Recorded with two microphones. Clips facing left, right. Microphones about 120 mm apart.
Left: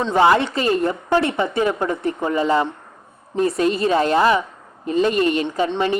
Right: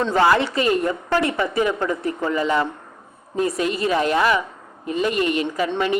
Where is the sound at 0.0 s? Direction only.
20° left (ahead or behind).